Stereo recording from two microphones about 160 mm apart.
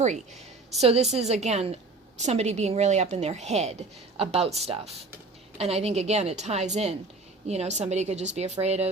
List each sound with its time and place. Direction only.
0.8 s a woman's voice: 40° right (ahead or behind)